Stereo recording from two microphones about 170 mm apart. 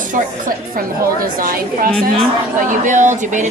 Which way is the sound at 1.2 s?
55° right (ahead or behind).